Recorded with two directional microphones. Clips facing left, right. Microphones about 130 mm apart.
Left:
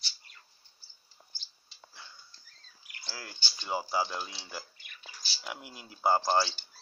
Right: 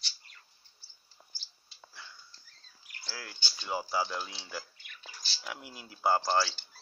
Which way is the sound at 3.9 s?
15° left (ahead or behind).